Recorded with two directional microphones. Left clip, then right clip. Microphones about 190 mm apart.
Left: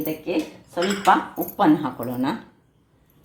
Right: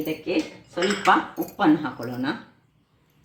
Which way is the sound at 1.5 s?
45° left (ahead or behind).